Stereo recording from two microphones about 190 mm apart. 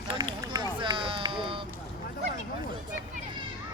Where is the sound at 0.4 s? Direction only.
20° right (ahead or behind).